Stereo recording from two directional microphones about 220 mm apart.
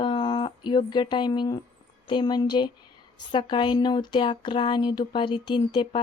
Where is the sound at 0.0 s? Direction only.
20° left (ahead or behind).